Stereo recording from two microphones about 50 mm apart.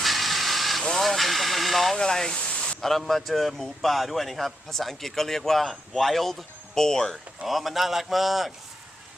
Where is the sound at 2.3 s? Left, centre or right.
Left.